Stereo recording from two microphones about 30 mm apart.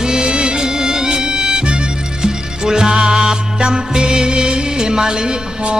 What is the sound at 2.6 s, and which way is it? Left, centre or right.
Music, right.